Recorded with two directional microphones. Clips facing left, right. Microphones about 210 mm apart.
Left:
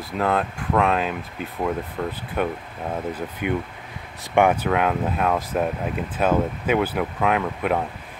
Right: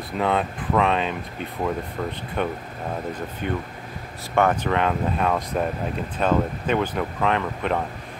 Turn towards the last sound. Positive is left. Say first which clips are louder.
# left 2 dB
turn(degrees=5)  # may be behind; listen again after turning